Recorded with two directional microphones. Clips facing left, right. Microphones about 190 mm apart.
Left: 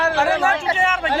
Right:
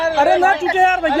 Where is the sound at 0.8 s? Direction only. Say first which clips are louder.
Right 7 dB; 40° right (ahead or behind).